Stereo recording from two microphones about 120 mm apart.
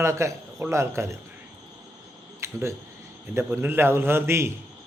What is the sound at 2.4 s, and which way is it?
A man's voice, 20° right (ahead or behind).